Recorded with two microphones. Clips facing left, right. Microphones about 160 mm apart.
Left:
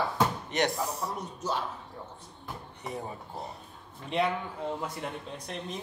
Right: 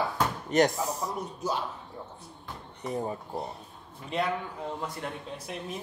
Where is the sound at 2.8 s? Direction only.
Centre (ahead or behind).